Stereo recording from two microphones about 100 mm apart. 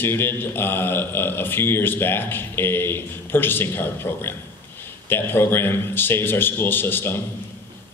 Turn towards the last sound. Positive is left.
turn(degrees=20)  # may be behind; listen again after turning